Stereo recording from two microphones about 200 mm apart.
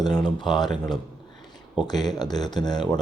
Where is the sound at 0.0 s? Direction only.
20° left (ahead or behind).